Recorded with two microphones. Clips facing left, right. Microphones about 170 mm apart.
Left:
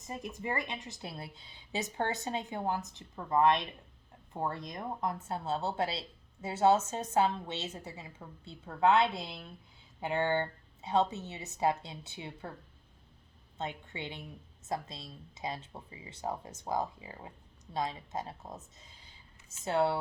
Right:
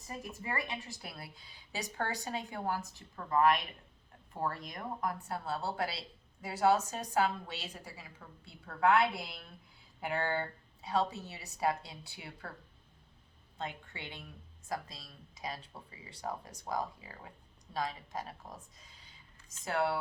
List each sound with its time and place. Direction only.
0.0 s speech: 20° left (ahead or behind)
13.6 s speech: 20° left (ahead or behind)